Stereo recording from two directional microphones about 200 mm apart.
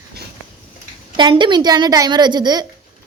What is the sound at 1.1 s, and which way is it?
A woman's voice, 25° right (ahead or behind).